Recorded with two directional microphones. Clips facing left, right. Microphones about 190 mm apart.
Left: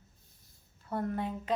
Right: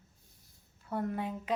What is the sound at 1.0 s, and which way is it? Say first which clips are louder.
Speech: left 1 dB; 10° right (ahead or behind).